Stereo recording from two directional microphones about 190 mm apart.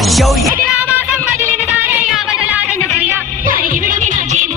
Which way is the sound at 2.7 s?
15° left (ahead or behind).